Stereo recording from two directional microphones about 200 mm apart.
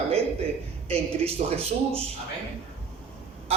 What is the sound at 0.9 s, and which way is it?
Speech, 30° right (ahead or behind).